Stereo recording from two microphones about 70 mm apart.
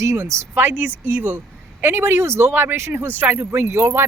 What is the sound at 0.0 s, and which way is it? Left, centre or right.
A man's voice, right.